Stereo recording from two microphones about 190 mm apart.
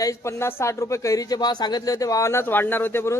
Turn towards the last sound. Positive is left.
turn(degrees=10)  # may be behind; listen again after turning